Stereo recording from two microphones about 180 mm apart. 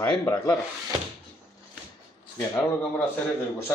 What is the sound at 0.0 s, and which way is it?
Speech, 15° left (ahead or behind).